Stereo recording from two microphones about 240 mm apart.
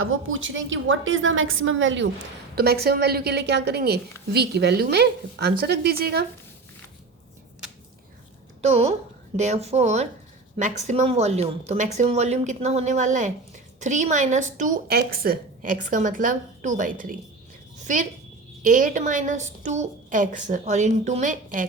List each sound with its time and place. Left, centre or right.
0.0 s a woman's voice: right
2.6 s a woman's voice: right
8.6 s a woman's voice: right
17.7 s a sound: right
18.6 s a woman's voice: right